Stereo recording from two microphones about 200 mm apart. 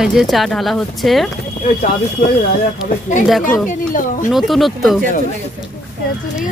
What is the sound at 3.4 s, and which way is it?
Speech, 40° left (ahead or behind).